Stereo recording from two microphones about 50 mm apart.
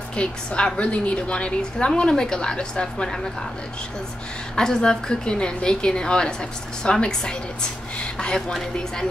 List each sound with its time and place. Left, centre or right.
0.1 s a woman's voice: left
4.6 s a woman's voice: centre